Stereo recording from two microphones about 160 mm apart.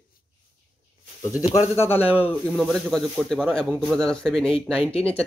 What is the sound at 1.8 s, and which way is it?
Speech, 15° left (ahead or behind).